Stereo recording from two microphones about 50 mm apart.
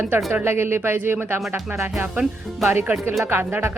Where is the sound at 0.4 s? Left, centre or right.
Right.